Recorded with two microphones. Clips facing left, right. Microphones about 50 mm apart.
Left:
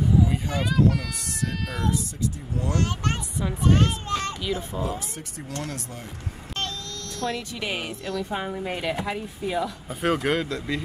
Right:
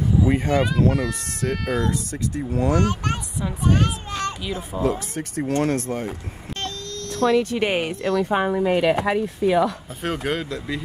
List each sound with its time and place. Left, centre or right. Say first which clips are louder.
0.3 s speech: right 7 dB; right
2.8 s a child's voice: right 4 dB; centre
4.8 s speech: right 8 dB; right
7.2 s speech: right 11 dB; right
10.0 s speech: left 2 dB; centre